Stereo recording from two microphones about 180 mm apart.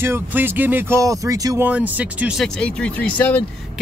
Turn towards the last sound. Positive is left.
turn(degrees=10)  # may be behind; listen again after turning